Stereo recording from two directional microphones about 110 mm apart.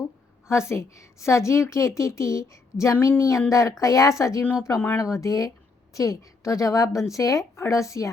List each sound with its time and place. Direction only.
0.4 s a woman's voice: 25° left (ahead or behind)